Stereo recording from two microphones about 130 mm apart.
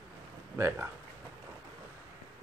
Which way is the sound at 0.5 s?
20° right (ahead or behind).